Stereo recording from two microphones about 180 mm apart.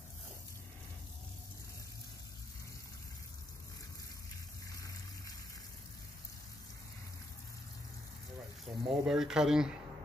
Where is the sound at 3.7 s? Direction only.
20° left (ahead or behind).